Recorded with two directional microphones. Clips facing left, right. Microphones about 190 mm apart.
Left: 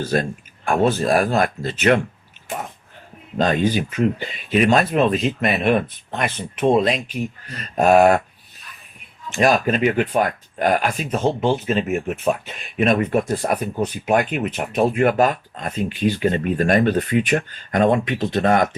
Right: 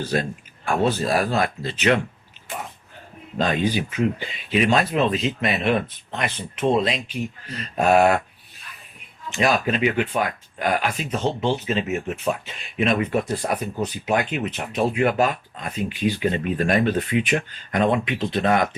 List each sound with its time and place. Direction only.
0.1 s speech: 45° left (ahead or behind)
3.3 s speech: 45° left (ahead or behind)
9.3 s speech: 50° left (ahead or behind)